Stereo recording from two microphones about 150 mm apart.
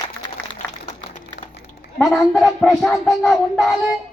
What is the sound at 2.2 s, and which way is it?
A man's voice, centre (ahead or behind).